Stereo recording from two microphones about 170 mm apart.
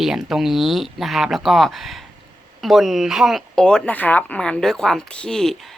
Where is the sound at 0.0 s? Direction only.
Centre (ahead or behind).